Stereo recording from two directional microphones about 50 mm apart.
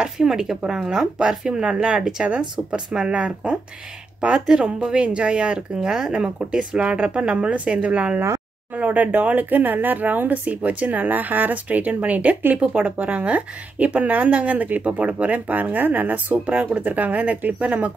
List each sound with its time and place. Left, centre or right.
0.0 s speech: centre